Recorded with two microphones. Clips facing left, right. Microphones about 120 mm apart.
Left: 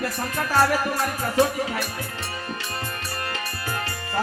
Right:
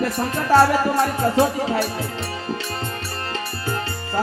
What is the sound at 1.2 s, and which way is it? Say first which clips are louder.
Music: right 3 dB; 25° right (ahead or behind).